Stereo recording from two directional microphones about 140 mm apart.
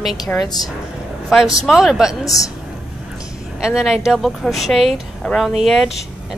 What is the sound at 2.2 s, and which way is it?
Speech, 25° left (ahead or behind).